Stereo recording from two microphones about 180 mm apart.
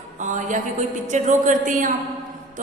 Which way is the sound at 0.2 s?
45° right (ahead or behind).